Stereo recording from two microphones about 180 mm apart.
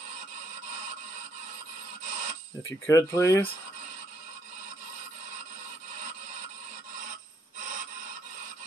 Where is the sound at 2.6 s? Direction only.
15° left (ahead or behind).